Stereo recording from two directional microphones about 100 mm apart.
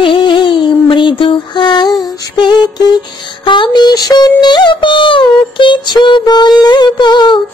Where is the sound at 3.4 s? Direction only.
55° left (ahead or behind).